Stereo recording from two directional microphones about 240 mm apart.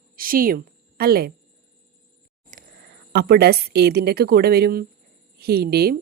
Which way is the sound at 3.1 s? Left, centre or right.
Right.